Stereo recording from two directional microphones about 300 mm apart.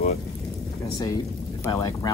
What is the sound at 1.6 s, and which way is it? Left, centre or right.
Speech, centre.